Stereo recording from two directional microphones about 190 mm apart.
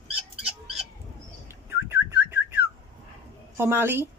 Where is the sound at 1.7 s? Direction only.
15° right (ahead or behind).